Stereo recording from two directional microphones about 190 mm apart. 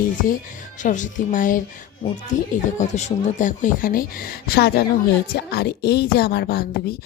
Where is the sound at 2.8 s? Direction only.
35° left (ahead or behind); by 6.6 s 55° left (ahead or behind).